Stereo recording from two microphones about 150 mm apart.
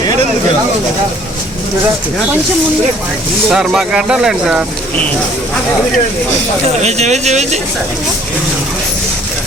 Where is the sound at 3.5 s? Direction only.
5° right (ahead or behind).